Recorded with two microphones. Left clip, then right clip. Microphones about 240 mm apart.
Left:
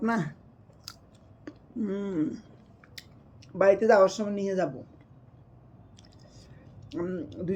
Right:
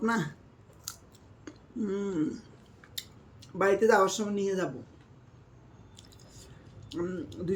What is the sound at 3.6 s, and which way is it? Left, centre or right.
Speech, centre.